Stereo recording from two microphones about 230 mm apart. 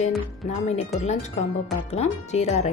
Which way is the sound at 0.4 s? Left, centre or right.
Left.